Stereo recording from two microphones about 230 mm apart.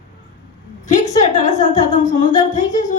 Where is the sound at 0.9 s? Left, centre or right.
Left.